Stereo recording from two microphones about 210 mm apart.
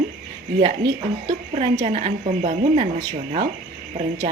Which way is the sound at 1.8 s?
30° right (ahead or behind).